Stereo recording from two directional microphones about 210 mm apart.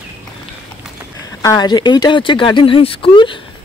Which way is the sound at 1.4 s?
20° left (ahead or behind).